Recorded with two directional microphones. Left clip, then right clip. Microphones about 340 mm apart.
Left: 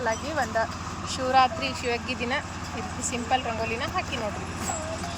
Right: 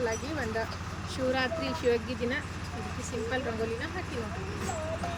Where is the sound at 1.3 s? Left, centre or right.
Centre.